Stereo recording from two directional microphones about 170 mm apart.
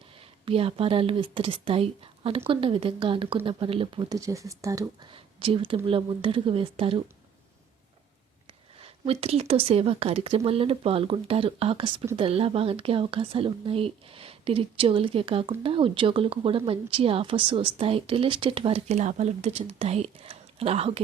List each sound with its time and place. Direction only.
0.2 s speech: 35° right (ahead or behind)
8.8 s speech: 35° right (ahead or behind)